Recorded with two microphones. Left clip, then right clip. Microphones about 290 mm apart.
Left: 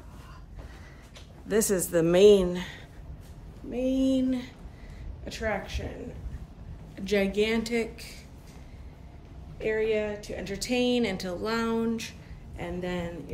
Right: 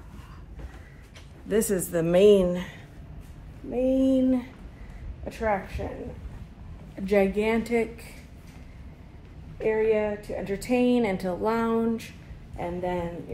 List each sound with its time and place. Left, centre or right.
1.5 s a woman's voice: centre
7.1 s a woman's voice: centre
9.7 s speech: centre